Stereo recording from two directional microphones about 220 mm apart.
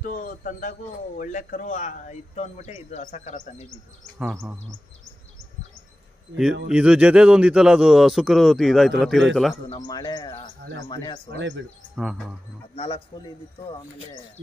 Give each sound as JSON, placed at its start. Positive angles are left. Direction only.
{"t": 0.0, "sound": "a man's voice", "side_deg": 35}
{"t": 4.2, "sound": "speech", "side_deg": -10}
{"t": 6.7, "sound": "a man's voice", "side_deg": -5}
{"t": 9.8, "sound": "a man's voice", "side_deg": 20}
{"t": 11.2, "sound": "speech", "side_deg": -55}
{"t": 11.9, "sound": "a man's voice", "side_deg": -5}
{"t": 12.7, "sound": "a man's voice", "side_deg": 25}